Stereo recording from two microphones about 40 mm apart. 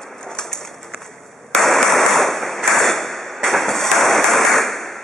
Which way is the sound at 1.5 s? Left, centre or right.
Centre.